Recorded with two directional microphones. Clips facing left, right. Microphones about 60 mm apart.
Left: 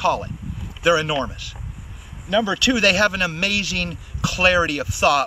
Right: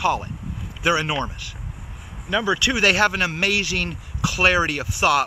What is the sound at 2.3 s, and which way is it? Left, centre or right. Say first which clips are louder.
Speech: left 2 dB; centre.